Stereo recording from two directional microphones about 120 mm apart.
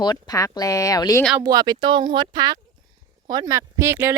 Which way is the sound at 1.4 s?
35° right (ahead or behind).